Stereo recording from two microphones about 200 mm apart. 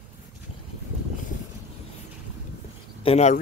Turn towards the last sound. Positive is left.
turn(degrees=35)  # may be behind; listen again after turning